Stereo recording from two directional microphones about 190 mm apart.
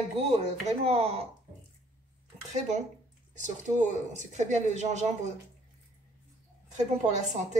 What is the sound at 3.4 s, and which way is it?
Speech, 40° right (ahead or behind).